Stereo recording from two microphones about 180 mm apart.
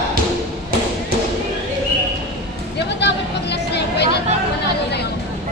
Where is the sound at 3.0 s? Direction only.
70° left (ahead or behind).